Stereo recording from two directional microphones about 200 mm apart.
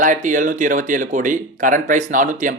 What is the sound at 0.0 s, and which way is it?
Speech, 40° right (ahead or behind).